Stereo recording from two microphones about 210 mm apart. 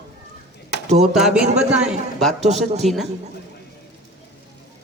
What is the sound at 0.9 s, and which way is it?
Speech, 30° right (ahead or behind).